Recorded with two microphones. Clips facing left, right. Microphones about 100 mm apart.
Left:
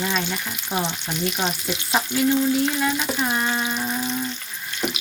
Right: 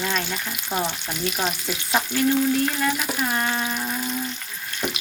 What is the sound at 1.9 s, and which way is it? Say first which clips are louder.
Frying: even; 15° left (ahead or behind).